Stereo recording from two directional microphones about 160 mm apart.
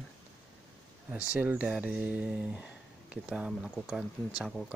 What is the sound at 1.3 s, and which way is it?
Speech, 10° right (ahead or behind).